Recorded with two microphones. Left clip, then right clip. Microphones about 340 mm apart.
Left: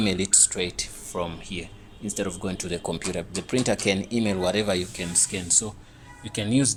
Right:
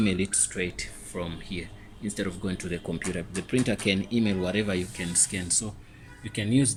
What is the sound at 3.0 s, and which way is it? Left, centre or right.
Speech, left.